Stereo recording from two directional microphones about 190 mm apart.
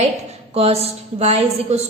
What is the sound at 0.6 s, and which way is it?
A woman's voice, 30° right (ahead or behind).